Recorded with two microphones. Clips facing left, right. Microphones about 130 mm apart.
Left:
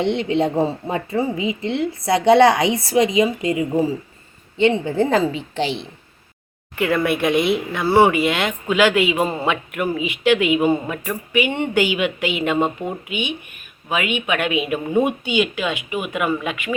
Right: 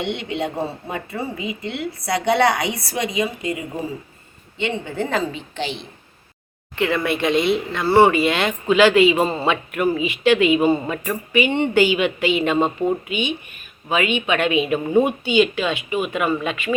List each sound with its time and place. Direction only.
0.0 s a woman's voice: 30° left (ahead or behind)
4.6 s a woman's voice: 35° left (ahead or behind)
6.7 s speech: 5° left (ahead or behind)